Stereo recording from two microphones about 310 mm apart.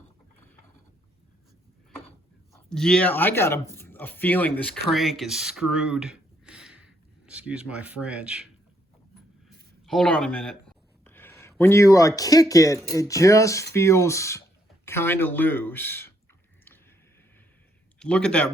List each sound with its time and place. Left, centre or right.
2.5 s speech: centre
9.5 s speech: centre
18.0 s speech: centre